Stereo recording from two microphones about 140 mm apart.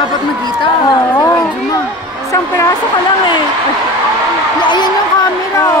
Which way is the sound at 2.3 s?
25° left (ahead or behind).